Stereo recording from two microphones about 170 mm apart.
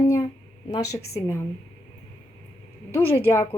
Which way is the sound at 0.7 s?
20° left (ahead or behind).